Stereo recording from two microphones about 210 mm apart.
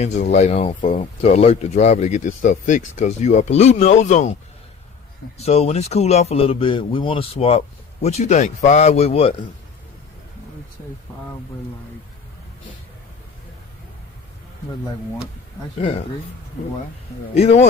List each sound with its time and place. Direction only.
0.0 s speech: 35° left (ahead or behind)
5.4 s speech: 30° left (ahead or behind)
17.3 s speech: 30° left (ahead or behind)